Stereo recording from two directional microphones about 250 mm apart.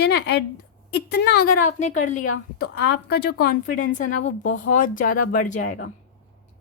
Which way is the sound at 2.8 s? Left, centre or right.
Left.